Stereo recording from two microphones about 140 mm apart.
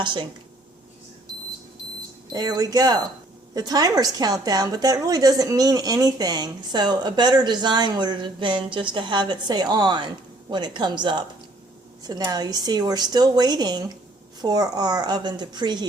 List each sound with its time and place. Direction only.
0.0 s a woman's voice: 35° right (ahead or behind)
2.3 s a woman's voice: 30° right (ahead or behind)